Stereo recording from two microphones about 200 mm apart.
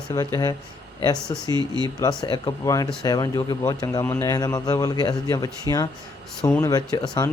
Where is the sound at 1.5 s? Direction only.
20° right (ahead or behind).